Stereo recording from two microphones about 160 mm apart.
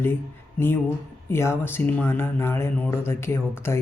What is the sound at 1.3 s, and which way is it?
Speech, 15° left (ahead or behind).